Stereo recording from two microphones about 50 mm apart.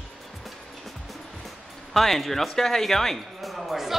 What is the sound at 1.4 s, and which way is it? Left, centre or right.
Speech, centre.